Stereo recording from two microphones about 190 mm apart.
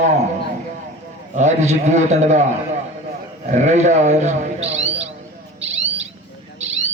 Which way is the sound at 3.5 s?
40° right (ahead or behind).